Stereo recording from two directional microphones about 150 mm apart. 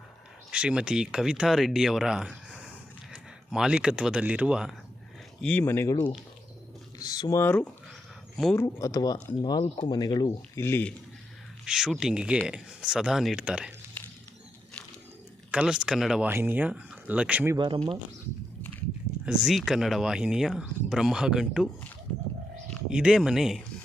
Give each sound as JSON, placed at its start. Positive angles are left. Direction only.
{"t": 0.5, "sound": "speech", "side_deg": -5}
{"t": 5.4, "sound": "speech", "side_deg": 10}
{"t": 5.9, "sound": "speech", "side_deg": 30}
{"t": 11.6, "sound": "speech", "side_deg": -5}
{"t": 15.5, "sound": "speech", "side_deg": -5}
{"t": 16.3, "sound": "speech", "side_deg": -15}
{"t": 18.6, "sound": "a sound", "side_deg": 10}
{"t": 19.2, "sound": "speech", "side_deg": -5}
{"t": 22.9, "sound": "speech", "side_deg": -5}